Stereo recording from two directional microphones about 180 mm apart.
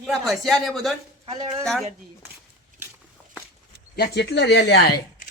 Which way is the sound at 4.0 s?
65° left (ahead or behind).